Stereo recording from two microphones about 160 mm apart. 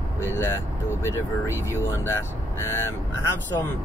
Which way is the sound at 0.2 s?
15° left (ahead or behind).